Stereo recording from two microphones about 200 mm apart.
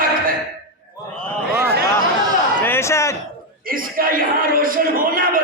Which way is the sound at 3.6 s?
45° right (ahead or behind).